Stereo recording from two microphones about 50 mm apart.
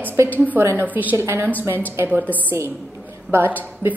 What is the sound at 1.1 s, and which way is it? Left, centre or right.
Speech, right.